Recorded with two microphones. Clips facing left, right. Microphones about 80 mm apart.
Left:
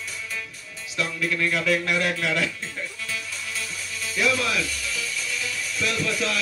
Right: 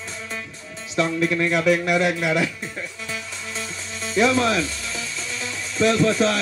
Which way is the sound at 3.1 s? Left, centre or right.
Right.